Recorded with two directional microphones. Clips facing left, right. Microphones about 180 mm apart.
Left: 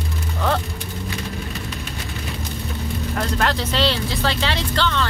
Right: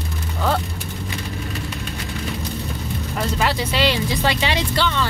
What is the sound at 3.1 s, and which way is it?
Vehicle, 5° right (ahead or behind).